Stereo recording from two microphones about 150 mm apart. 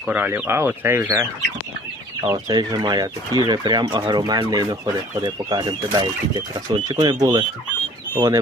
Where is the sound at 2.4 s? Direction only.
30° right (ahead or behind).